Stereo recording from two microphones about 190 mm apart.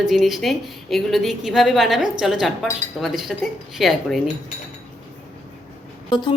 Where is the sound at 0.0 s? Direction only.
Centre (ahead or behind).